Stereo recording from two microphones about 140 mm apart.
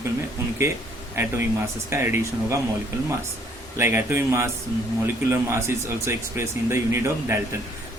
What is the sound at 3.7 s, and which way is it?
A man's voice, 15° right (ahead or behind).